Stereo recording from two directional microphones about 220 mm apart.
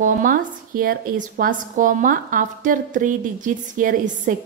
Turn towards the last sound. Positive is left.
turn(degrees=-35)  # may be behind; listen again after turning